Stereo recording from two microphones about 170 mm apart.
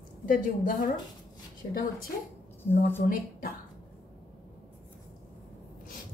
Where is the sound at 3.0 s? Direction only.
55° left (ahead or behind).